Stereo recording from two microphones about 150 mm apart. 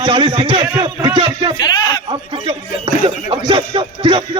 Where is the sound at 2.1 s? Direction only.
35° right (ahead or behind).